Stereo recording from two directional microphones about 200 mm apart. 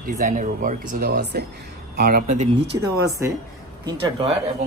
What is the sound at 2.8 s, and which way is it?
Speech, 15° right (ahead or behind).